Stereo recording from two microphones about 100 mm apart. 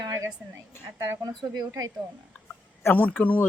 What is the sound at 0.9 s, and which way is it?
Speech, 30° right (ahead or behind).